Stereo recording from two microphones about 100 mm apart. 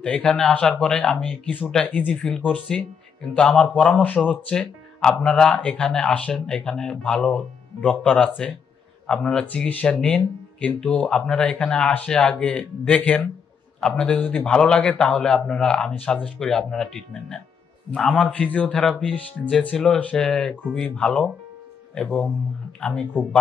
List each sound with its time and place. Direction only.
0.0 s speech: 5° left (ahead or behind)